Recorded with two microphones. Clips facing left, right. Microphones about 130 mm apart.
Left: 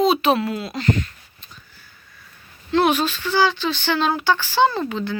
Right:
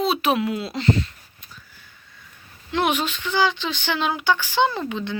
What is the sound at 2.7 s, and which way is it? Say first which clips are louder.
Speech: left 4 dB; 15° right (ahead or behind).